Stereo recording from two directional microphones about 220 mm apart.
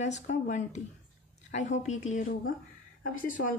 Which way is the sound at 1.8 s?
35° left (ahead or behind).